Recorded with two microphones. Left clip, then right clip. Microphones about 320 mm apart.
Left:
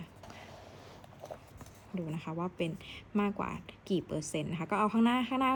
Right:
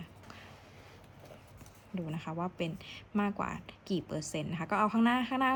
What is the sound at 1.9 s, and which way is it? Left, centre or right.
A woman's voice, centre.